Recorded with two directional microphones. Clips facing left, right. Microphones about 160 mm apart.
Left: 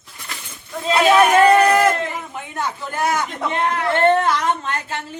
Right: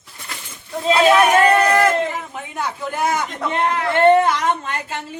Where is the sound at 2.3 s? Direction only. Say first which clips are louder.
Even; 5° right (ahead or behind).